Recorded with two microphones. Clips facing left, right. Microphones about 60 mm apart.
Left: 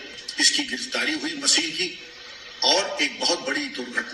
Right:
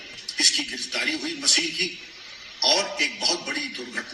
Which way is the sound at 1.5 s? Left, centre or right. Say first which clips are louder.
Right 1 dB; right.